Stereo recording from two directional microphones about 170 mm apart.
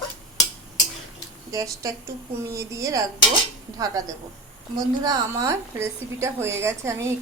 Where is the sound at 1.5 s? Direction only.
20° right (ahead or behind).